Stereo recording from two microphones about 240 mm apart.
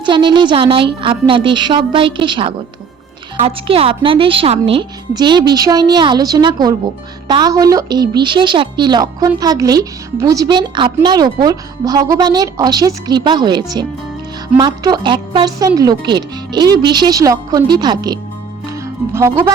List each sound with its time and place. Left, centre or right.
0.0 s a woman's voice: centre